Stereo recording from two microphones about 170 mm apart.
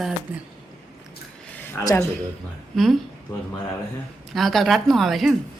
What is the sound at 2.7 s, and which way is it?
Speech, centre (ahead or behind).